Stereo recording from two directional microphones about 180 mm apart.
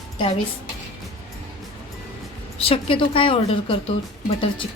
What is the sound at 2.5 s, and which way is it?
A woman's voice, 30° left (ahead or behind).